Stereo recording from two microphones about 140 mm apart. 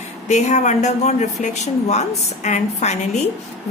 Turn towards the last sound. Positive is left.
turn(degrees=55)  # may be behind; listen again after turning